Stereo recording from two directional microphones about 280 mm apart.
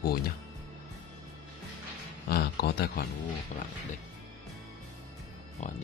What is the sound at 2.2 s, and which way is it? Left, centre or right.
Speech, left.